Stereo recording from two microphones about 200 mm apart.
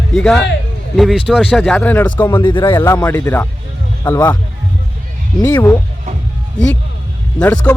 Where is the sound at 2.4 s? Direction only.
25° left (ahead or behind).